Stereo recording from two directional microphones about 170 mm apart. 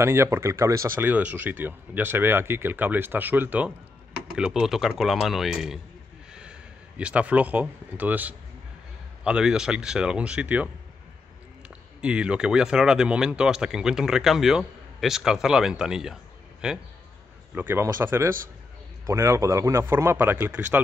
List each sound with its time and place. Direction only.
0.0 s speech: 15° right (ahead or behind)
12.0 s speech: 5° right (ahead or behind)